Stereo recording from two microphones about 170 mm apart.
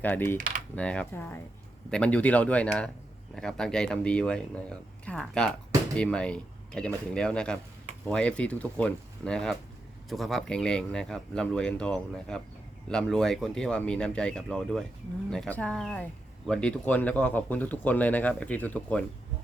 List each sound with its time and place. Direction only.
0.0 s speech: 10° left (ahead or behind)
0.3 s coin: 50° right (ahead or behind)
0.8 s speech: 5° left (ahead or behind)